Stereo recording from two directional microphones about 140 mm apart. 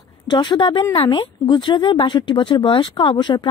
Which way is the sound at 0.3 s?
30° left (ahead or behind).